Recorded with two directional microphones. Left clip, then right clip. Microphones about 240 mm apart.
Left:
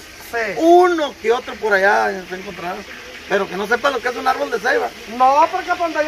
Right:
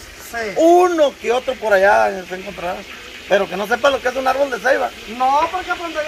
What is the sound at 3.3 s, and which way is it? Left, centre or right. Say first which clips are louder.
Speech: right 2 dB; right.